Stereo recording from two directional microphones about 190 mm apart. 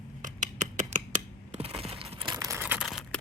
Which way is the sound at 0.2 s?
40° right (ahead or behind).